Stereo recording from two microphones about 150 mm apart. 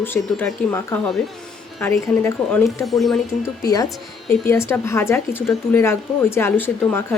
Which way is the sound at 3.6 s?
25° left (ahead or behind).